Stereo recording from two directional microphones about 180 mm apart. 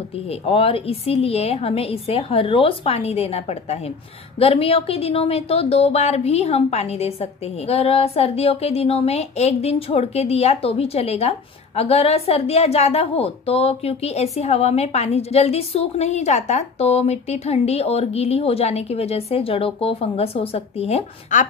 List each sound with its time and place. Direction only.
0.3 s a woman's voice: 30° left (ahead or behind)